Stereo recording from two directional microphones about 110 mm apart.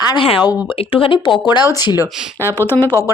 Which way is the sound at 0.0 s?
40° left (ahead or behind).